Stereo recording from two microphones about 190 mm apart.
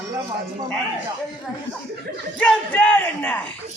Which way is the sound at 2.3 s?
10° left (ahead or behind).